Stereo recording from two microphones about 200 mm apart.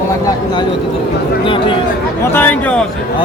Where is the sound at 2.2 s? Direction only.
10° left (ahead or behind).